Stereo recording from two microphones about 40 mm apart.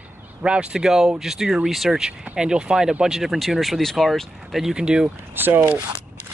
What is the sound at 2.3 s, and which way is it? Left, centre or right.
Speech, right.